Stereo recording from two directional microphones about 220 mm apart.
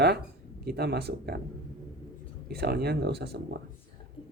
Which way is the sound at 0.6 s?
45° right (ahead or behind).